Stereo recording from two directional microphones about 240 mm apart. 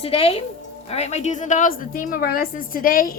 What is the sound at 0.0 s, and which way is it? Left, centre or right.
A woman's voice, left.